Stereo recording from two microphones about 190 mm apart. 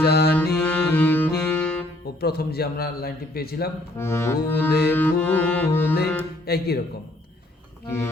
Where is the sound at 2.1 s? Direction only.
55° left (ahead or behind).